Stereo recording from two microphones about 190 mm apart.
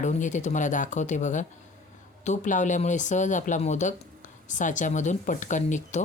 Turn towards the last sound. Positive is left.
turn(degrees=40)  # may be behind; listen again after turning